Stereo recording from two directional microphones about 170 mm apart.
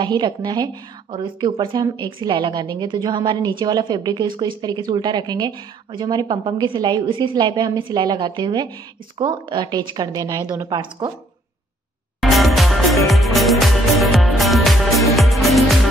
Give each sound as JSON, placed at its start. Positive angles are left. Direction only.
{"t": 0.0, "sound": "a woman's voice", "side_deg": -25}
{"t": 12.2, "sound": "music", "side_deg": 0}